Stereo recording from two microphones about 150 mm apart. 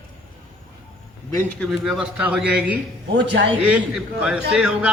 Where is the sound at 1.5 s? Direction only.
Centre (ahead or behind).